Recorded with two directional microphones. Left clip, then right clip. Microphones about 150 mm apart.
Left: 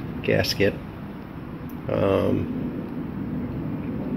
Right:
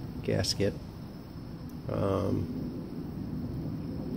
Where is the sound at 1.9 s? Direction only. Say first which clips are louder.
Left 9 dB; 10° right (ahead or behind).